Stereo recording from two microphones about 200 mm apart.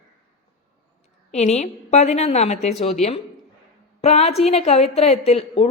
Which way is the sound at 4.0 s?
30° left (ahead or behind).